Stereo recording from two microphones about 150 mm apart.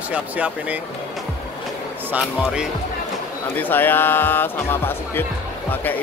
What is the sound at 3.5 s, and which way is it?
Speech, 15° left (ahead or behind).